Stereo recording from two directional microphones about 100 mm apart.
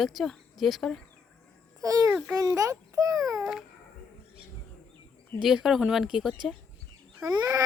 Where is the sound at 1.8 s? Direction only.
35° right (ahead or behind).